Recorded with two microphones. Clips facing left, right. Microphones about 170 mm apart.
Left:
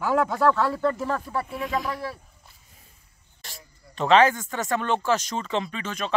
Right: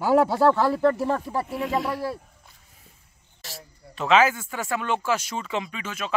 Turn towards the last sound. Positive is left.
turn(degrees=-5)  # may be behind; listen again after turning